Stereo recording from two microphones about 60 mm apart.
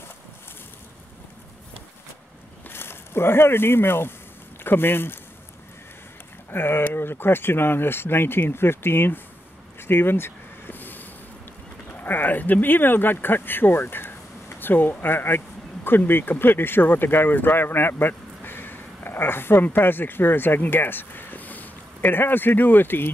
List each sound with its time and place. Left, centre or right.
2.7 s speech: left
6.5 s speech: left
9.8 s a sound: left
12.0 s speech: left